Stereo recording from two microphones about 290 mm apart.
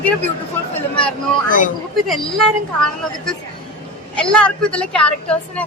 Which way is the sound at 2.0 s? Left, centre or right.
Centre.